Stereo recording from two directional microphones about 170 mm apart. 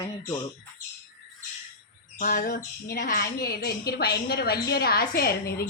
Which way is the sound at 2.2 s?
50° left (ahead or behind).